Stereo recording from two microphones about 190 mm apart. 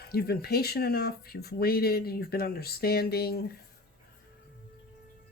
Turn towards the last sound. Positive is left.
turn(degrees=55)  # may be behind; listen again after turning